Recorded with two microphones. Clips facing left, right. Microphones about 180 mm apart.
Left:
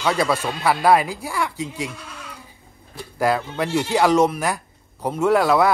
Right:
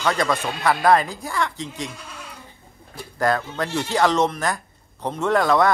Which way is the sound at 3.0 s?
10° left (ahead or behind).